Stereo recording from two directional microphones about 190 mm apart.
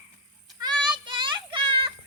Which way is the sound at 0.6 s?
25° right (ahead or behind).